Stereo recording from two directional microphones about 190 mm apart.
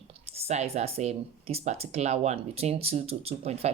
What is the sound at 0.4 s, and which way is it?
Speech, 35° right (ahead or behind).